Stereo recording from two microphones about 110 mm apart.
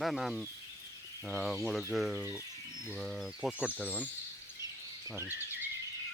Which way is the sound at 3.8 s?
15° left (ahead or behind).